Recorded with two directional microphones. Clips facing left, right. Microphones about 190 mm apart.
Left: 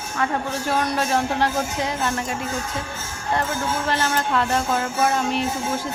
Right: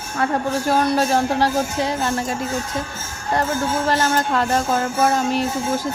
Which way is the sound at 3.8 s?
40° right (ahead or behind).